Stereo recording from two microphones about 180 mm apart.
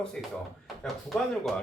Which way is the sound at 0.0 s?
5° left (ahead or behind).